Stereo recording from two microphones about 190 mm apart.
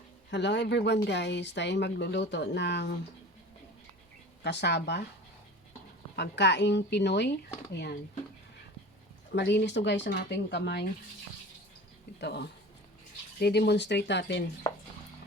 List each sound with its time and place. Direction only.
0.3 s speech: 65° left (ahead or behind)
4.4 s speech: 65° left (ahead or behind)
6.1 s speech: 65° left (ahead or behind)
9.3 s speech: 65° left (ahead or behind)
12.2 s speech: 60° left (ahead or behind)